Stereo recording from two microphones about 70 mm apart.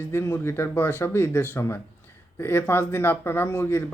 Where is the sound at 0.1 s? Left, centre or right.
Left.